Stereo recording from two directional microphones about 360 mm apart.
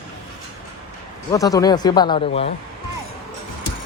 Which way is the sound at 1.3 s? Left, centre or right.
Centre.